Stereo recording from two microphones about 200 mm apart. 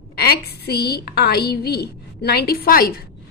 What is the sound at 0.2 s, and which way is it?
A woman's voice, 50° left (ahead or behind).